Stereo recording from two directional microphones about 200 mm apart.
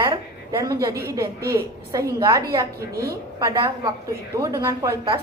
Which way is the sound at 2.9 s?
50° right (ahead or behind).